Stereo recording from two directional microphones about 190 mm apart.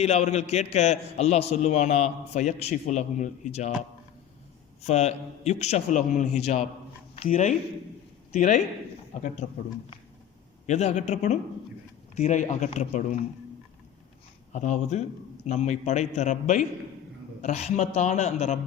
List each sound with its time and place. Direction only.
0.0 s a man's voice: 35° left (ahead or behind)
4.8 s a man's voice: 35° left (ahead or behind)
10.7 s a man's voice: 35° left (ahead or behind)
14.5 s a man's voice: 40° left (ahead or behind)